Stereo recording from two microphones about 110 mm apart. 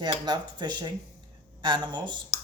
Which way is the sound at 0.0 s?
40° right (ahead or behind).